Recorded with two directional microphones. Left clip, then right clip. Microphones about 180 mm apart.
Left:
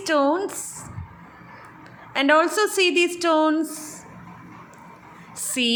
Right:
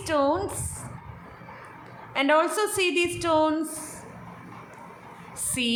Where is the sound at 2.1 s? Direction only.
25° left (ahead or behind).